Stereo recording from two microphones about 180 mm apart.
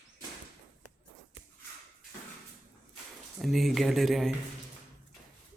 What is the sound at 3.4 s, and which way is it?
Speech, centre (ahead or behind).